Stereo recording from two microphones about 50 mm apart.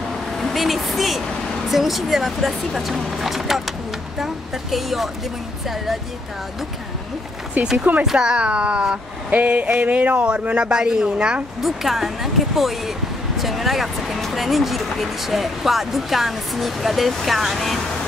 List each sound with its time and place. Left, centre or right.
0.4 s a sound: centre
1.7 s speech: centre
7.6 s speech: right
8.0 s speech: centre
11.6 s speech: centre